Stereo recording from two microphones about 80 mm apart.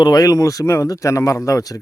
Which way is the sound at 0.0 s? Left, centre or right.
Left.